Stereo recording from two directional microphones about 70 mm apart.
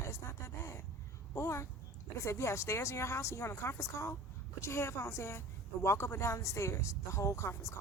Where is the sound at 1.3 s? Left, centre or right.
Left.